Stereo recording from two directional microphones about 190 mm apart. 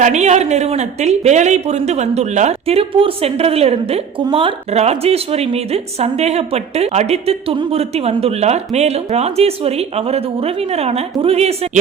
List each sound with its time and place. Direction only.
0.0 s speech: 35° right (ahead or behind)